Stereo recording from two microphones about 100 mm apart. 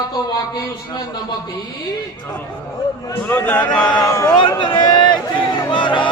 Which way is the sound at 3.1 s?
20° left (ahead or behind).